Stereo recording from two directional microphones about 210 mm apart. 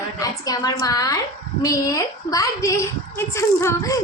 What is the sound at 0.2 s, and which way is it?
A woman's voice, 15° left (ahead or behind).